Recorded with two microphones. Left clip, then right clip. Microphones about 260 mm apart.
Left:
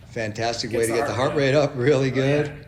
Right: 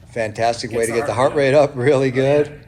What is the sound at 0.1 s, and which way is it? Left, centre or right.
A man's voice, right.